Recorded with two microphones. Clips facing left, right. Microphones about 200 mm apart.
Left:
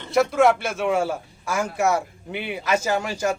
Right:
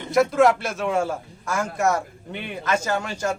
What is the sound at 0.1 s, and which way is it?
A man's voice, centre (ahead or behind).